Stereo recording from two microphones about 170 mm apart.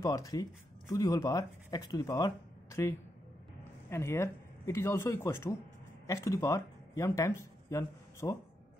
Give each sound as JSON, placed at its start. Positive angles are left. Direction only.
{"t": 0.0, "sound": "speech", "side_deg": 20}